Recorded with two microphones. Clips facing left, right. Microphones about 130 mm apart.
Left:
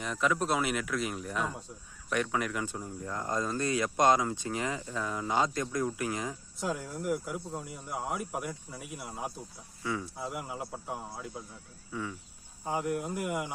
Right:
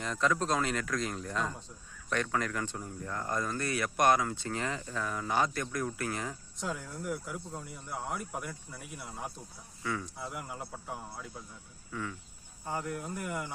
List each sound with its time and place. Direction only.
0.0 s speech: 5° left (ahead or behind)
9.8 s speech: 20° left (ahead or behind)
10.2 s speech: 5° left (ahead or behind)
11.9 s speech: 15° left (ahead or behind)